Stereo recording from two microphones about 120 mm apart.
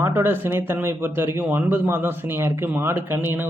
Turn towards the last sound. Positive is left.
turn(degrees=-15)  # may be behind; listen again after turning